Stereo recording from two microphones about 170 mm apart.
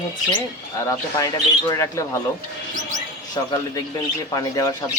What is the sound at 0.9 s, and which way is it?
Speech, 20° left (ahead or behind).